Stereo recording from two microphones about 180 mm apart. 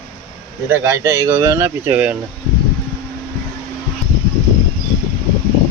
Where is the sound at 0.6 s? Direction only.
15° right (ahead or behind).